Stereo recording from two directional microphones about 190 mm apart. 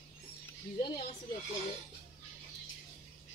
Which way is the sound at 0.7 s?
45° left (ahead or behind).